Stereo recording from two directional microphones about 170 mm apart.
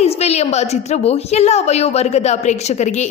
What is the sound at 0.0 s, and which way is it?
A woman's voice, 40° left (ahead or behind).